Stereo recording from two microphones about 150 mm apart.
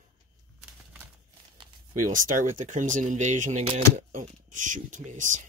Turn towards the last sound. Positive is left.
turn(degrees=-55)  # may be behind; listen again after turning